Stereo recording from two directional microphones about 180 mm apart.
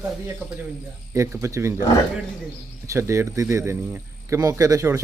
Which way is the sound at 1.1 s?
15° right (ahead or behind).